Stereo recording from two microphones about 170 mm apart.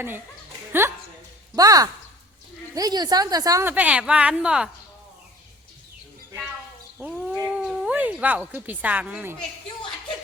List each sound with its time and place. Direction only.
0.7 s a sound: 15° right (ahead or behind)
1.5 s a woman's voice: 20° right (ahead or behind); by 4.7 s 5° right (ahead or behind)
7.0 s goat: 5° right (ahead or behind)
7.4 s speech: 5° right (ahead or behind)